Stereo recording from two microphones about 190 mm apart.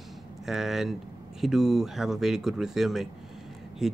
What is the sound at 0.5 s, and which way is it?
Speech, centre (ahead or behind).